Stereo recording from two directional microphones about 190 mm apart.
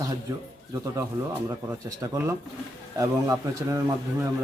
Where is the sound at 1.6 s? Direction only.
15° right (ahead or behind).